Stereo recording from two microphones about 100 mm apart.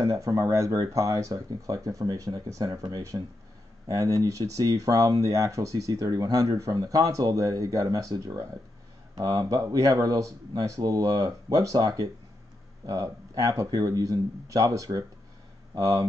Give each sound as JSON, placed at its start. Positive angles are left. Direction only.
{"t": 0.0, "sound": "speech", "side_deg": -35}